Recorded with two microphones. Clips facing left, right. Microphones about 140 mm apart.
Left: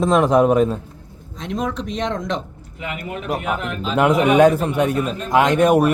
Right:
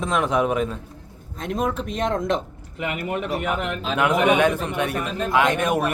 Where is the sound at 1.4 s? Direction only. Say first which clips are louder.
Even; 45° right (ahead or behind).